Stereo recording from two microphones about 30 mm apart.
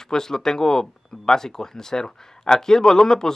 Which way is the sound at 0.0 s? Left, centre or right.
Centre.